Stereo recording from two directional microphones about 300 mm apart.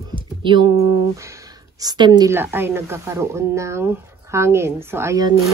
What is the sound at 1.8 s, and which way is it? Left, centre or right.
Speech, centre.